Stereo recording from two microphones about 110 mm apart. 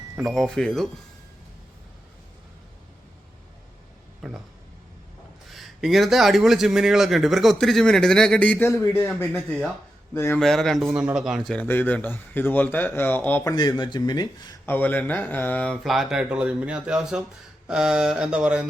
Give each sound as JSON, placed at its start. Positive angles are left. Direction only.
{"t": 0.2, "sound": "speech", "side_deg": 0}
{"t": 4.2, "sound": "speech", "side_deg": -5}
{"t": 5.5, "sound": "speech", "side_deg": 0}
{"t": 8.7, "sound": "a man's voice", "side_deg": 30}
{"t": 9.0, "sound": "speech", "side_deg": 15}
{"t": 10.3, "sound": "speech", "side_deg": 5}
{"t": 11.5, "sound": "speech", "side_deg": 15}
{"t": 13.4, "sound": "speech", "side_deg": 35}
{"t": 14.7, "sound": "speech", "side_deg": 15}
{"t": 17.7, "sound": "mantra", "side_deg": -5}